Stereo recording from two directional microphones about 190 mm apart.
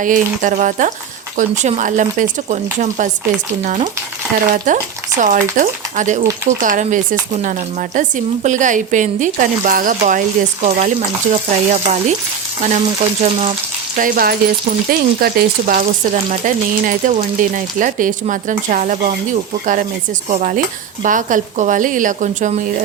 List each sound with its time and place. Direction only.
0.0 s speech: 45° right (ahead or behind)
20.3 s speech: 45° right (ahead or behind)